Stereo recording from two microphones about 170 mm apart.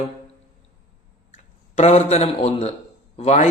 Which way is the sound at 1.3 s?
40° left (ahead or behind).